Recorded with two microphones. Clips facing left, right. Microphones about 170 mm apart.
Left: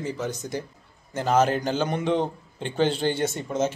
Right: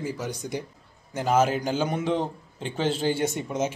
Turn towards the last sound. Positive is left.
turn(degrees=-15)  # may be behind; listen again after turning